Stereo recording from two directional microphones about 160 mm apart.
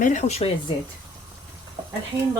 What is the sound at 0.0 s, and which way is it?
Speech, 50° left (ahead or behind).